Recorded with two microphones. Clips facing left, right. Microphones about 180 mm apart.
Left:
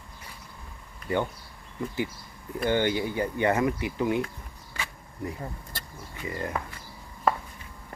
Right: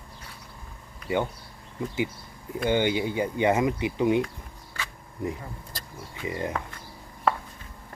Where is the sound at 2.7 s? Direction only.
15° right (ahead or behind).